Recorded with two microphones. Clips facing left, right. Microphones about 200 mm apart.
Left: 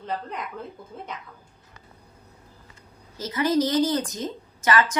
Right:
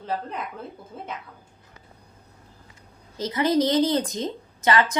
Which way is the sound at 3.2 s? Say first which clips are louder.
Right 1 dB; 20° right (ahead or behind).